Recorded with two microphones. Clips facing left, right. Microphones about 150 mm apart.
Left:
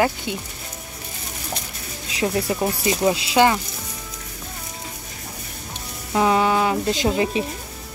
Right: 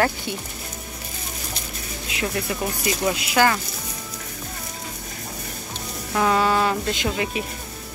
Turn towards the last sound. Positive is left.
turn(degrees=30)  # may be behind; listen again after turning